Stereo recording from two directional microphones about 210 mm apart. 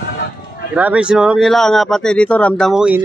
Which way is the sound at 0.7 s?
5° right (ahead or behind).